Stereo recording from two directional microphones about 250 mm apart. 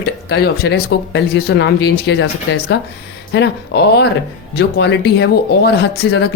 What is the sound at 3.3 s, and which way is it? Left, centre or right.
Speech, left.